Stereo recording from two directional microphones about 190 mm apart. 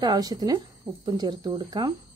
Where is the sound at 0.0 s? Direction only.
20° right (ahead or behind).